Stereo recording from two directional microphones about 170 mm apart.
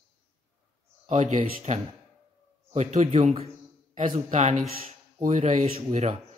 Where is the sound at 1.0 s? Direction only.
40° right (ahead or behind).